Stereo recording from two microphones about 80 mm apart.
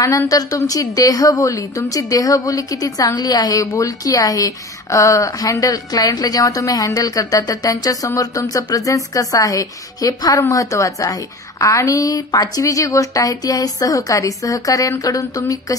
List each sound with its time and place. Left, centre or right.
0.3 s a woman's voice: left
3.2 s a woman's voice: left